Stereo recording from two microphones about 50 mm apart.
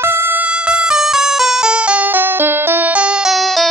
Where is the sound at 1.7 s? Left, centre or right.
Right.